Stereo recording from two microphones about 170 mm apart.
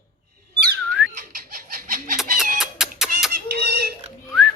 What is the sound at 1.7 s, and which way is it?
Chicken, 55° right (ahead or behind).